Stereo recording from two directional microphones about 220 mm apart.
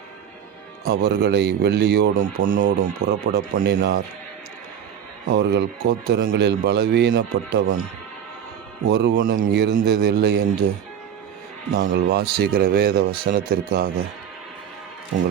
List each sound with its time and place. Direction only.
0.9 s speech: 45° right (ahead or behind)
5.3 s speech: 50° right (ahead or behind)
8.9 s speech: 45° right (ahead or behind)
11.7 s speech: 45° right (ahead or behind)